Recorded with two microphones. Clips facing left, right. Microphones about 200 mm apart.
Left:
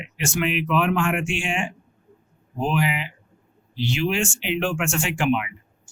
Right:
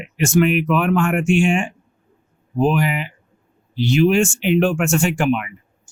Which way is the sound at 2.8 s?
50° right (ahead or behind).